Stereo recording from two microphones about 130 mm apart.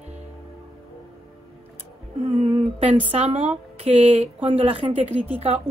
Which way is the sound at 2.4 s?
50° right (ahead or behind).